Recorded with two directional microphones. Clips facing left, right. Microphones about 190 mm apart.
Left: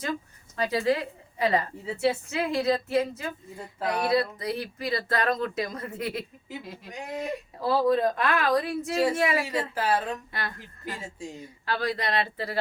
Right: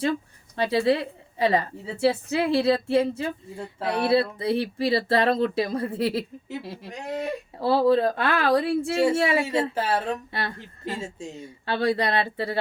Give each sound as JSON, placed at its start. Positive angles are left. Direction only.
{"t": 0.5, "sound": "a woman's voice", "side_deg": -30}